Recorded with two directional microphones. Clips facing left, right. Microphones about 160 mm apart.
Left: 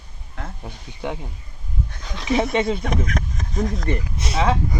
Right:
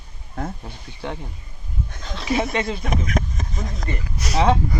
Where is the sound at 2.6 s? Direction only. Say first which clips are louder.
Left 2 dB; 5° right (ahead or behind).